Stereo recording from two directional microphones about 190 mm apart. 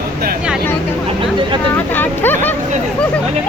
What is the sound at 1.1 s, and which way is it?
Speech, 25° right (ahead or behind).